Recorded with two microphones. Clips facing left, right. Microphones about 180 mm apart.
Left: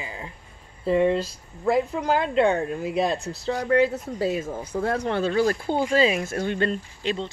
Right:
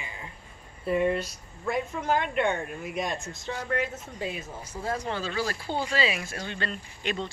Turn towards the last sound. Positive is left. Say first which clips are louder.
# left 4 dB
turn(degrees=25)  # may be behind; listen again after turning